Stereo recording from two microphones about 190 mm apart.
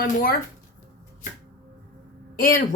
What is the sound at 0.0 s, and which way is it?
Speech, 50° left (ahead or behind).